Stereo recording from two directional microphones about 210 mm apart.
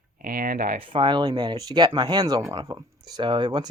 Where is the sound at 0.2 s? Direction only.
45° right (ahead or behind).